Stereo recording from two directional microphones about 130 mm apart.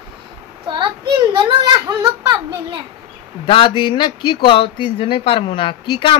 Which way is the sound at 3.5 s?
40° left (ahead or behind).